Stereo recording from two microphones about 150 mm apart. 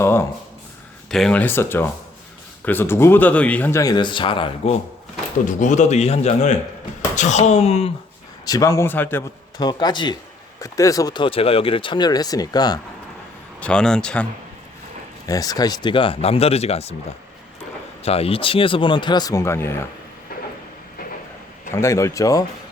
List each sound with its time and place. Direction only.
0.0 s a sound: 15° left (ahead or behind)
1.1 s speech: 5° left (ahead or behind); by 4.8 s 40° left (ahead or behind)
5.5 s a man's voice: 55° left (ahead or behind)
8.4 s speech: 25° left (ahead or behind)
9.6 s speech: 25° left (ahead or behind)
13.6 s speech: 5° left (ahead or behind)
15.3 s speech: 25° left (ahead or behind)
21.7 s speech: 20° left (ahead or behind)